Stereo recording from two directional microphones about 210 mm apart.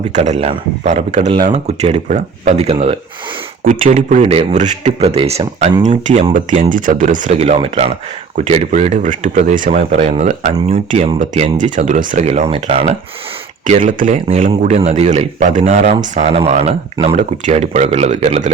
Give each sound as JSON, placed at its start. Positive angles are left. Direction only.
{"t": 0.1, "sound": "a man's voice", "side_deg": -30}
{"t": 3.6, "sound": "a man's voice", "side_deg": -40}